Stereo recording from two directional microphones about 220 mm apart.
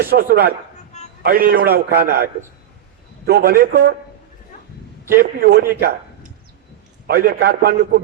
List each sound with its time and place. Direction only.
0.0 s a man's voice: 45° right (ahead or behind)
5.1 s a man's voice: 40° right (ahead or behind)